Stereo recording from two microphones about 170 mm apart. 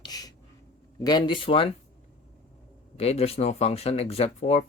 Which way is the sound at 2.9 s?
35° left (ahead or behind).